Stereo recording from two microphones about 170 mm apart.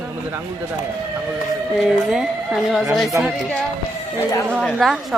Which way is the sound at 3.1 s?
15° right (ahead or behind).